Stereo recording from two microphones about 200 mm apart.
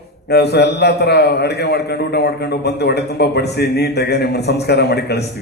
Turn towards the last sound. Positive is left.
turn(degrees=55)  # may be behind; listen again after turning